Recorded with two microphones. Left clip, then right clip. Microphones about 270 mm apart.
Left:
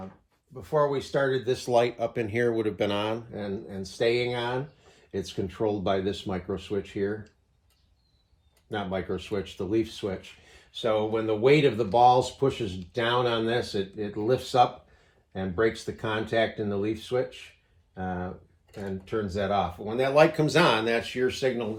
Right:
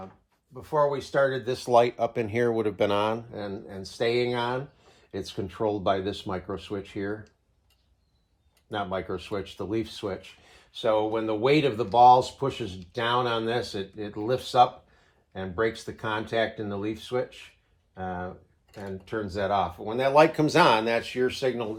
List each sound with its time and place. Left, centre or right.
0.5 s speech: centre
8.7 s speech: centre